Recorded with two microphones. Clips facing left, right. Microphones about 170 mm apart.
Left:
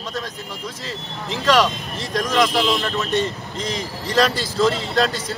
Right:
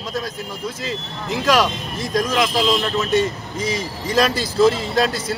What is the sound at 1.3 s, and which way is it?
A man's voice, 10° right (ahead or behind).